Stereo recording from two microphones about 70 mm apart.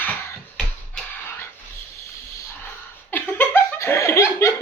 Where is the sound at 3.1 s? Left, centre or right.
Left.